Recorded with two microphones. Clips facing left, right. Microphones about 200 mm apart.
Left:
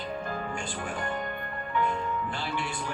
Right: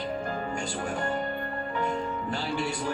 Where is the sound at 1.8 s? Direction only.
40° right (ahead or behind).